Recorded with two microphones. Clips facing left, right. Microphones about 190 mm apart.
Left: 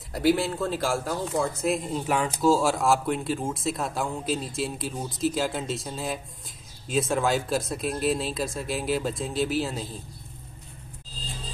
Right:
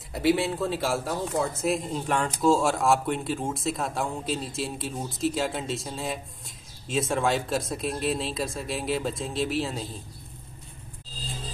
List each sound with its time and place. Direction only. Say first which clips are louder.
0.1 s speech: left 1 dB; centre (ahead or behind)